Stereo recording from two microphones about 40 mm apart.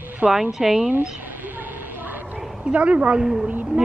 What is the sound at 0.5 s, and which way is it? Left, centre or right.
Speech, centre.